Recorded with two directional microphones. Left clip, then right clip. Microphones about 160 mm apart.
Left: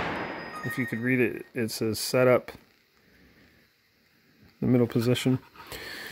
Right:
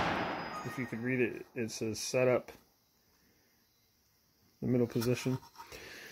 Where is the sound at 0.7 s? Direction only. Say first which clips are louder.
Left 8 dB; 60° left (ahead or behind).